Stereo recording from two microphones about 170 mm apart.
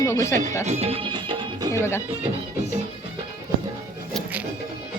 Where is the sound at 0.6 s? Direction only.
35° right (ahead or behind).